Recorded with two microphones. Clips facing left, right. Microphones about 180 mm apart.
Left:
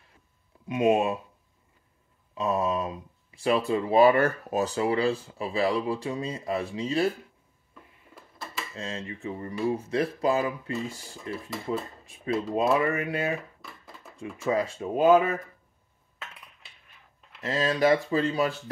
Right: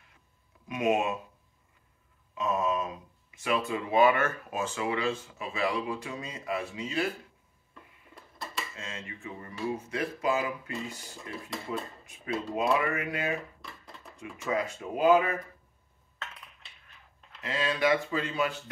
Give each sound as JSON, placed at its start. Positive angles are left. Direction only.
{"t": 0.7, "sound": "speech", "side_deg": 30}
{"t": 2.3, "sound": "speech", "side_deg": 35}
{"t": 7.7, "sound": "a sound", "side_deg": 0}
{"t": 8.7, "sound": "speech", "side_deg": 35}
{"t": 13.6, "sound": "a sound", "side_deg": 0}
{"t": 14.2, "sound": "speech", "side_deg": 30}
{"t": 17.4, "sound": "speech", "side_deg": 40}